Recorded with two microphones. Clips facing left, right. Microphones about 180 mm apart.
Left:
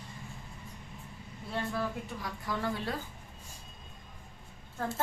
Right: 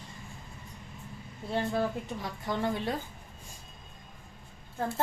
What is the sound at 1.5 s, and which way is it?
Speech, 30° right (ahead or behind).